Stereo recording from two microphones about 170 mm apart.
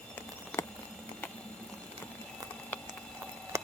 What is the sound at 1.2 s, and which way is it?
Boiling, 10° left (ahead or behind).